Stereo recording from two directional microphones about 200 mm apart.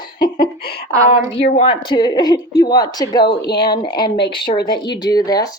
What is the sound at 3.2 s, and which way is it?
Speech, 55° left (ahead or behind).